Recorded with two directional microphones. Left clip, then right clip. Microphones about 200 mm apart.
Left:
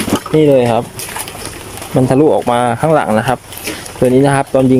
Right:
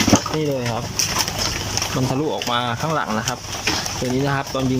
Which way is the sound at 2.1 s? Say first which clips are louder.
Left 14 dB; 40° left (ahead or behind).